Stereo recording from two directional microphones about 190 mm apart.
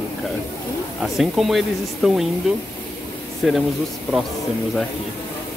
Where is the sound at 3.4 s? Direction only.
Centre (ahead or behind).